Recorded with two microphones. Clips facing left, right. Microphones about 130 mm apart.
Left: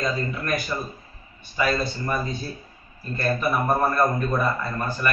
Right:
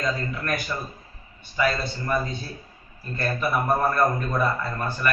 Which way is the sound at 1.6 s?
15° left (ahead or behind).